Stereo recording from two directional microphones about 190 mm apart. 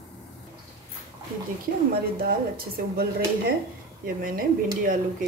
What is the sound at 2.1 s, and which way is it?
Speech, 50° right (ahead or behind).